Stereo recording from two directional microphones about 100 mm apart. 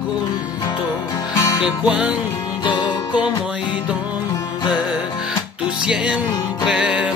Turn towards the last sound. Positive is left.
turn(degrees=-10)  # may be behind; listen again after turning